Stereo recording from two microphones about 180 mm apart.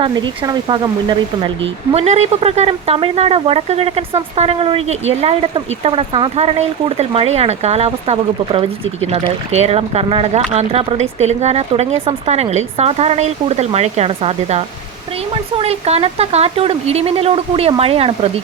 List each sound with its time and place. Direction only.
0.0 s speech: 25° right (ahead or behind)
1.9 s speech: 35° right (ahead or behind)